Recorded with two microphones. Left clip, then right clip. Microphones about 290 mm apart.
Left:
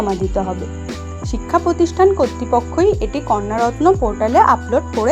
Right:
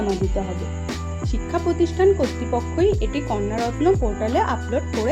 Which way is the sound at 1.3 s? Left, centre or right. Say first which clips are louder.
Left 7 dB; left.